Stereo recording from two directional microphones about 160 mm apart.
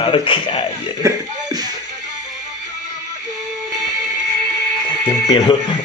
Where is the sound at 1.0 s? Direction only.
25° right (ahead or behind).